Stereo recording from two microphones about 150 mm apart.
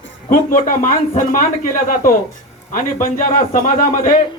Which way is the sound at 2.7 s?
65° left (ahead or behind).